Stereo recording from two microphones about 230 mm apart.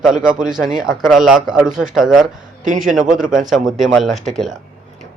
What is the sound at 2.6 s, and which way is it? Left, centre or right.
Speech, right.